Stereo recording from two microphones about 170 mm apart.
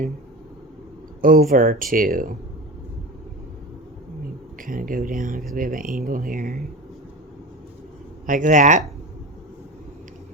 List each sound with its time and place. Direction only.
1.2 s speech: 55° right (ahead or behind)
4.6 s speech: 55° right (ahead or behind)
8.3 s speech: 50° right (ahead or behind)